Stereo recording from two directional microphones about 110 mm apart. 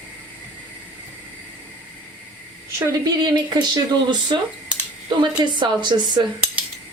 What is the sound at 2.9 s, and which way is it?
Speech, 40° right (ahead or behind).